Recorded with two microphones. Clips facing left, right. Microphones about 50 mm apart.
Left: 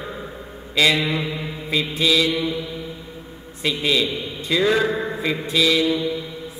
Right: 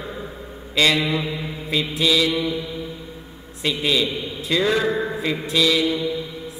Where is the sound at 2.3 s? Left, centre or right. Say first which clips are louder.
Even; left.